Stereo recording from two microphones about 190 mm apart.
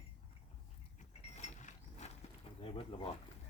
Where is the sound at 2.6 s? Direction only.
30° left (ahead or behind).